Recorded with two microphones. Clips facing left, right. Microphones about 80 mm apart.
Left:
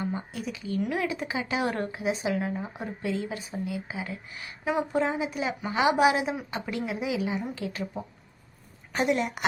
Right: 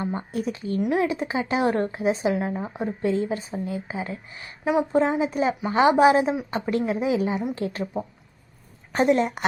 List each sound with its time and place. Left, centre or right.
0.0 s a woman's voice: right